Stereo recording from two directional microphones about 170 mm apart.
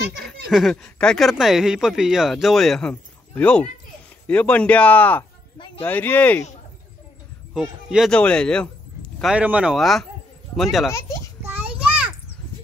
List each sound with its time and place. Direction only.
0.5 s speech: centre (ahead or behind)
7.5 s speech: 5° right (ahead or behind)
9.2 s speech: 5° right (ahead or behind)
11.4 s children playing: 10° right (ahead or behind)